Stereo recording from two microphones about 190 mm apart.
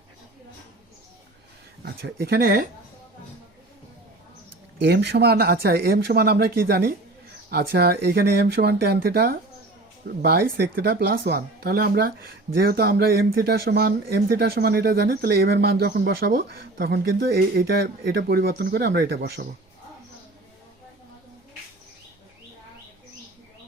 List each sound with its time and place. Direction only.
1.8 s speech: 55° right (ahead or behind)
4.8 s speech: 60° right (ahead or behind)